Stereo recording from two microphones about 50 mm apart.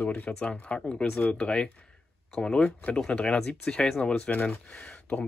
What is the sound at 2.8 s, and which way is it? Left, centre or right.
Speech, left.